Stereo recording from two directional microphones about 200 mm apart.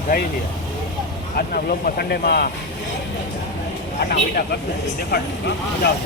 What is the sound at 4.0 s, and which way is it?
Speech, 50° left (ahead or behind).